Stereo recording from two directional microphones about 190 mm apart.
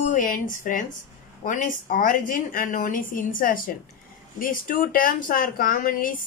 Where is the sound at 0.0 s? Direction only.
45° left (ahead or behind).